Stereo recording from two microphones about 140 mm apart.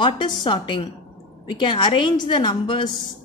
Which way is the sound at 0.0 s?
35° left (ahead or behind).